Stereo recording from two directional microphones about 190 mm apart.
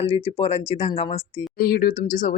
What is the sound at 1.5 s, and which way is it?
Speech, 50° left (ahead or behind).